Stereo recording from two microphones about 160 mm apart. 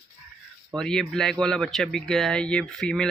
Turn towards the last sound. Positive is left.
turn(degrees=5)  # may be behind; listen again after turning